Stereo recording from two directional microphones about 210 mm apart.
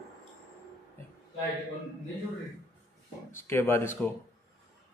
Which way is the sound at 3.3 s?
10° left (ahead or behind).